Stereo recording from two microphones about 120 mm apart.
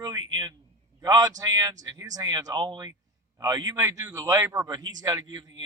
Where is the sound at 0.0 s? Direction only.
35° right (ahead or behind).